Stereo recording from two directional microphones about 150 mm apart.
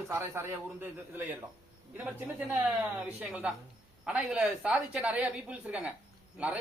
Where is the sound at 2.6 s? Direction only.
10° right (ahead or behind).